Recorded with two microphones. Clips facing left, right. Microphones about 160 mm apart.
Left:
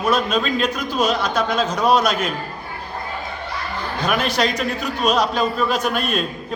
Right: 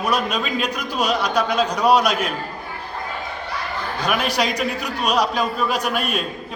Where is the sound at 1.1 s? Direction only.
15° right (ahead or behind).